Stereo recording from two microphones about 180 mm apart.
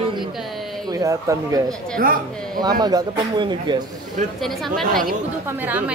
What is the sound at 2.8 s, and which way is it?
A man's voice, 20° right (ahead or behind).